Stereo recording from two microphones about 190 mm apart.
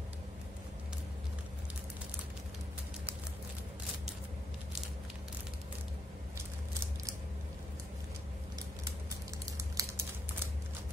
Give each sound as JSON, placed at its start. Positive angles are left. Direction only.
{"t": 9.8, "sound": "typing", "side_deg": -15}